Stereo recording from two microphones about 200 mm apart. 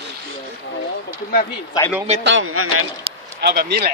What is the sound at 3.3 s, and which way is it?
Speech, 55° right (ahead or behind).